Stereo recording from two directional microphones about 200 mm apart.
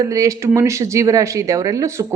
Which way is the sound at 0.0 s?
15° right (ahead or behind).